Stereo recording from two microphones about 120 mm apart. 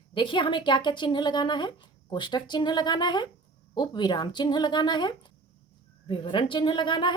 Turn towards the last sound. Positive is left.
turn(degrees=40)  # may be behind; listen again after turning